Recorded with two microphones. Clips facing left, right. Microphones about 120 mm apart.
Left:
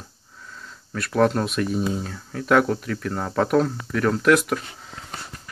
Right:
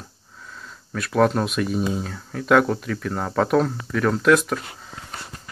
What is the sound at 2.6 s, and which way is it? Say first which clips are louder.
Speech: even; 20° right (ahead or behind).